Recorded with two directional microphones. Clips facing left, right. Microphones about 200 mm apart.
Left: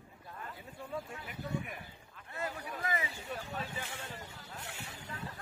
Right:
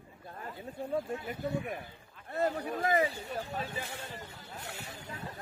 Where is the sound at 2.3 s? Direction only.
40° right (ahead or behind).